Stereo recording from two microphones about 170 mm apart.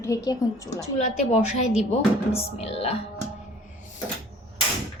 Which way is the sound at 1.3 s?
40° left (ahead or behind).